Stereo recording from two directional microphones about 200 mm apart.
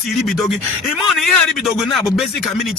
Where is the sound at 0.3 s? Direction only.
Centre (ahead or behind).